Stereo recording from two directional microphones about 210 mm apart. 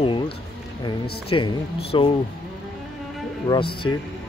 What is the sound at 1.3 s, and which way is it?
Speech, 25° left (ahead or behind).